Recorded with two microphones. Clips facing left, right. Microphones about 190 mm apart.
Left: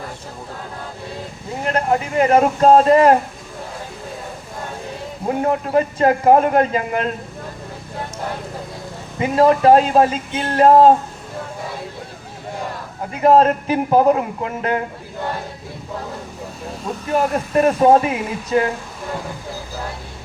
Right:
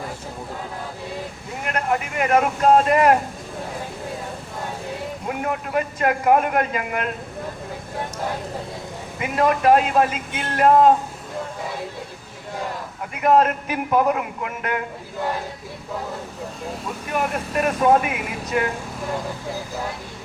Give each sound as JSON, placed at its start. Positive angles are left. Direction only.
{"t": 1.6, "sound": "a man's voice", "side_deg": 30}
{"t": 5.2, "sound": "a man's voice", "side_deg": 30}
{"t": 9.1, "sound": "a man's voice", "side_deg": 30}
{"t": 13.0, "sound": "a man's voice", "side_deg": 30}
{"t": 17.1, "sound": "a man's voice", "side_deg": 30}